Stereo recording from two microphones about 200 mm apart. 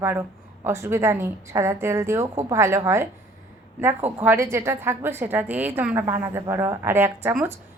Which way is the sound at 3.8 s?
10° right (ahead or behind).